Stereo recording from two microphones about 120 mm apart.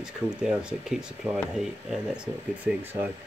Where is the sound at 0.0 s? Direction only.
5° right (ahead or behind).